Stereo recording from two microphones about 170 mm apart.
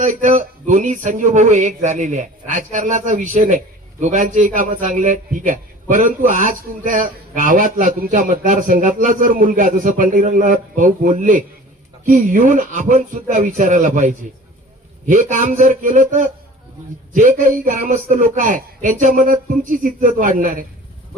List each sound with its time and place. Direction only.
0.0 s a man's voice: 50° right (ahead or behind)